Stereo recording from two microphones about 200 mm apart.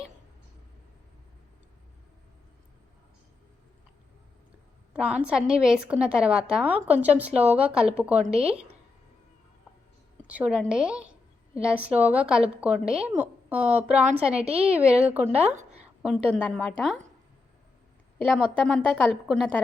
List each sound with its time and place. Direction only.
4.9 s a woman's voice: 5° right (ahead or behind)
8.2 s a woman's voice: 30° right (ahead or behind)
10.2 s a woman's voice: 5° right (ahead or behind)
14.4 s a woman's voice: 30° right (ahead or behind)
14.7 s a woman's voice: 5° right (ahead or behind)
18.2 s a woman's voice: 5° right (ahead or behind)